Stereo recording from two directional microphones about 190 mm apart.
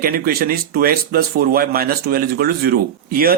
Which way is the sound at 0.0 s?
55° right (ahead or behind).